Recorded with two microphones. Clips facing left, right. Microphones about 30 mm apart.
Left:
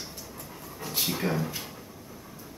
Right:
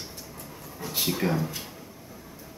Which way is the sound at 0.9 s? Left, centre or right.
Centre.